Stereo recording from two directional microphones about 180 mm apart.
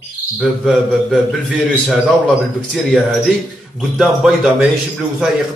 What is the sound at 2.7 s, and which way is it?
Speech, centre (ahead or behind).